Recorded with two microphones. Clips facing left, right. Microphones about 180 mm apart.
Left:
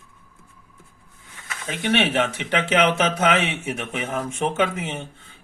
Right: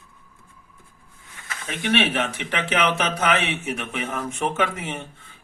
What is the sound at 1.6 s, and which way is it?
Speech, 25° left (ahead or behind).